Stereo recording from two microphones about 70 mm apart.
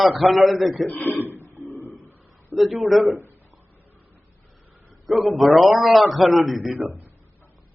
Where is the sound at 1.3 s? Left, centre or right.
Left.